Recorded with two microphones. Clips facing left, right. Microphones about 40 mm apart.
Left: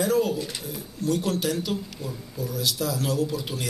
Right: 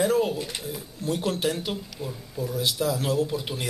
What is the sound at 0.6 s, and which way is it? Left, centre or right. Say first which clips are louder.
Speech: right 1 dB; centre.